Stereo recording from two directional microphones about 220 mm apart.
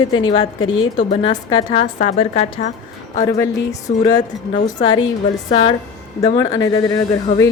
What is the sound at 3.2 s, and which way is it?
A woman's voice, 15° left (ahead or behind).